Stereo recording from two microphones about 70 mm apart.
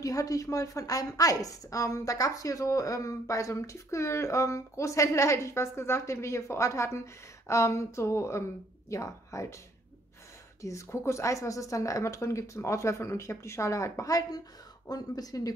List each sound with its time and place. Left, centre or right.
0.0 s a woman's voice: left
10.6 s a woman's voice: left